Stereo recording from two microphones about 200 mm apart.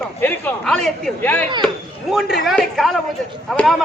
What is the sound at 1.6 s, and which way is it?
Speech, centre (ahead or behind).